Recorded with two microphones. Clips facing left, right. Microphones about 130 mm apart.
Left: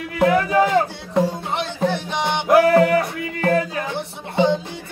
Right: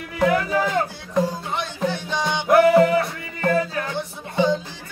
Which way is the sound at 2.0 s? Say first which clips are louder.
Left 2 dB; 25° left (ahead or behind).